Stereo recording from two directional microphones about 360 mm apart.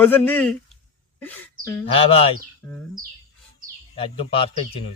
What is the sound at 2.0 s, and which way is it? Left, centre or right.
Speech, centre.